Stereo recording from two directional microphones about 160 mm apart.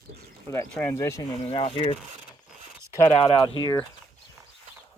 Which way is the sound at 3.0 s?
40° left (ahead or behind).